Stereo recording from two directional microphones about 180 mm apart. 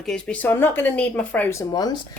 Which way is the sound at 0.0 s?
5° left (ahead or behind).